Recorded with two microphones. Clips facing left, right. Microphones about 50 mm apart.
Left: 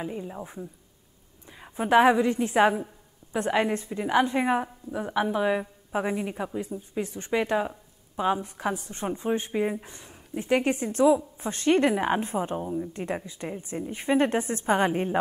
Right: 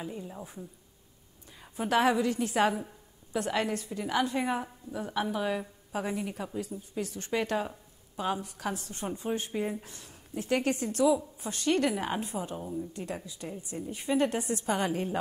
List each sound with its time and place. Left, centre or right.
0.0 s a woman's voice: left